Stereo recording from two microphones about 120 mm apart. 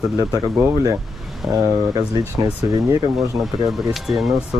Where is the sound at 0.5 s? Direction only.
25° right (ahead or behind).